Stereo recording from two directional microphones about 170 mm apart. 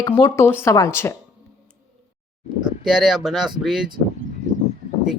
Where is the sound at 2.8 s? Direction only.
Centre (ahead or behind).